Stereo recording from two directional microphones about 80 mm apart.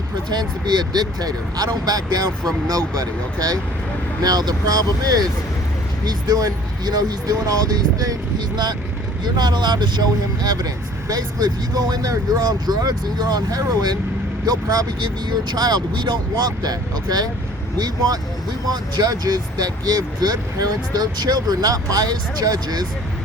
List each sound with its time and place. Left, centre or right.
0.3 s speech: right
4.2 s speech: right
9.2 s speech: right
11.1 s speech: right